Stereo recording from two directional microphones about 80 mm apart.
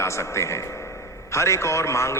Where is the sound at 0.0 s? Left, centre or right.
Left.